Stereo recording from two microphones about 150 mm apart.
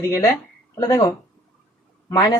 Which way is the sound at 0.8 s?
20° left (ahead or behind).